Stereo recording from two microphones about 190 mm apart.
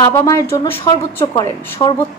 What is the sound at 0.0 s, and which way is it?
A woman's voice, 20° left (ahead or behind).